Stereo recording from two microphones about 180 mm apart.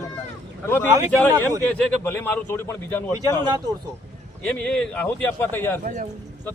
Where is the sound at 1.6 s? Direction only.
10° left (ahead or behind).